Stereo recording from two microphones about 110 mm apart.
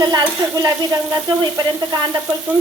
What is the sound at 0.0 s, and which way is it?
Stir, 35° right (ahead or behind).